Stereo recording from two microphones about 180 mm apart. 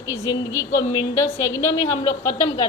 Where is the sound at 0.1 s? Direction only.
15° left (ahead or behind).